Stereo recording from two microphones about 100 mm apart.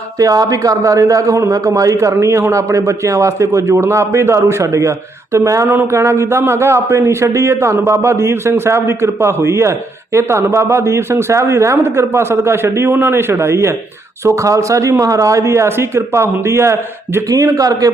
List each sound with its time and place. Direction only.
0.2 s a man's voice: 35° right (ahead or behind)